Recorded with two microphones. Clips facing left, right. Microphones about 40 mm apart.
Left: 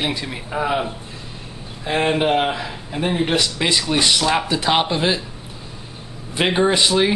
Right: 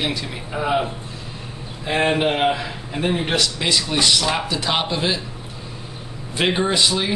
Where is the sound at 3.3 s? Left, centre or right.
Centre.